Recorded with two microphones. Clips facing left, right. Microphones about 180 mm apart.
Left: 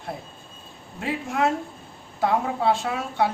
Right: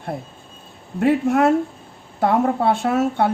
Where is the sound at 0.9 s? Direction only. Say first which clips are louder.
Right 10 dB; 55° right (ahead or behind).